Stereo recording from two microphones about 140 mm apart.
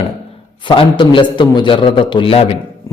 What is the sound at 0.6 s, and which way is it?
A man's voice, 35° left (ahead or behind).